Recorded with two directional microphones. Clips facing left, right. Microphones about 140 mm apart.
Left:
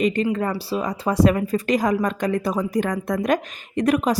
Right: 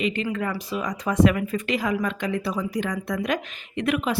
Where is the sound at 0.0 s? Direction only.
40° left (ahead or behind).